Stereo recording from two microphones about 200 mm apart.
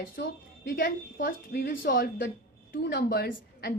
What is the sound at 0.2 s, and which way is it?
A woman's voice, 50° left (ahead or behind).